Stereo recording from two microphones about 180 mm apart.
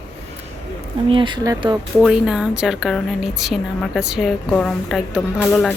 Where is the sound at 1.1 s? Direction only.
25° right (ahead or behind).